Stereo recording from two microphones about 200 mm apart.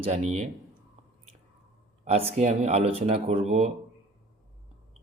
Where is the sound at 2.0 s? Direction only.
30° right (ahead or behind).